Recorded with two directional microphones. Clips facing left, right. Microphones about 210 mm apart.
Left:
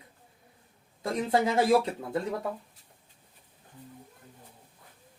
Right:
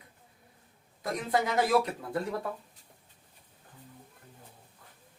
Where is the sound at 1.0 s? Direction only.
25° left (ahead or behind).